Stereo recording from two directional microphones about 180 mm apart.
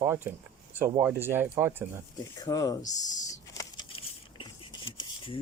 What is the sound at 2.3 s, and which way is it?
Speech, 20° left (ahead or behind).